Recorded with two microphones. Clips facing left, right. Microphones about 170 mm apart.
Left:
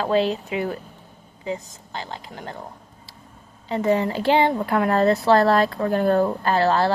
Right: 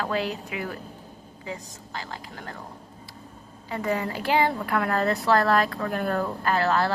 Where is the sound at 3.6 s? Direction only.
25° left (ahead or behind).